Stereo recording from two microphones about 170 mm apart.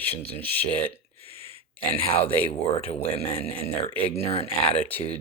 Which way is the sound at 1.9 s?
35° left (ahead or behind).